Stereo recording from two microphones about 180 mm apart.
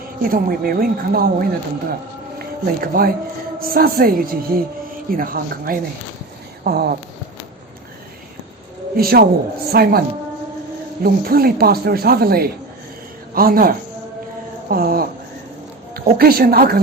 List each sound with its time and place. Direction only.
0.2 s speech: 50° right (ahead or behind)
9.0 s speech: 55° right (ahead or behind)
11.0 s speech: 55° right (ahead or behind)